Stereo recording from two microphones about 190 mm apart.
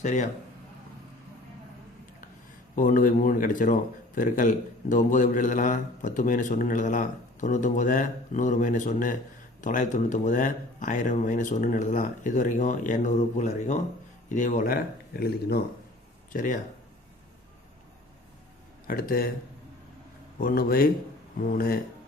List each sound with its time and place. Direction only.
0.0 s speech: 40° left (ahead or behind)
2.7 s speech: 45° left (ahead or behind)
16.3 s speech: 45° left (ahead or behind)
18.9 s speech: 50° left (ahead or behind)
20.4 s speech: 50° left (ahead or behind)